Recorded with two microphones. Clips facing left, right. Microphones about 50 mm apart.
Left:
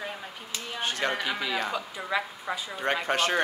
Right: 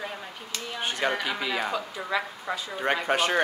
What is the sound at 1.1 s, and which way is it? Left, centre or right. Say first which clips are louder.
Speech: right 1 dB; centre.